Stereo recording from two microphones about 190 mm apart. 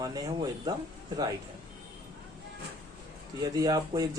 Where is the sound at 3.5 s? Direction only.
20° right (ahead or behind).